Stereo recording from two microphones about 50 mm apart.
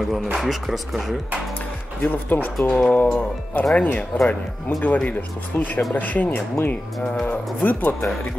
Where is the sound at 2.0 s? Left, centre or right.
Left.